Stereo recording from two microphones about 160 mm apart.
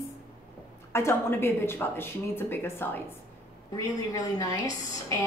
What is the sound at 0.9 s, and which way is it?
A woman's voice, 15° left (ahead or behind).